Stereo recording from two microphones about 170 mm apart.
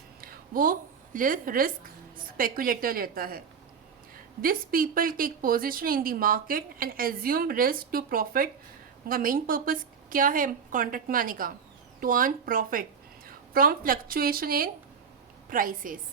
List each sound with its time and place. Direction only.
0.2 s a woman's voice: 55° right (ahead or behind)